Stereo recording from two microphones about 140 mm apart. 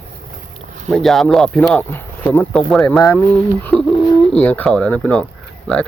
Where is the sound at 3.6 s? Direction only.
5° left (ahead or behind).